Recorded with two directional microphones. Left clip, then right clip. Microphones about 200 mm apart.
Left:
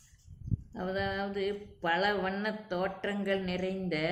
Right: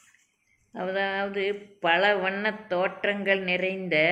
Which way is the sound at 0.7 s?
10° left (ahead or behind).